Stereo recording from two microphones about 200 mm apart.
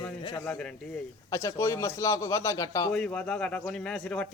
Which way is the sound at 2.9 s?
5° left (ahead or behind).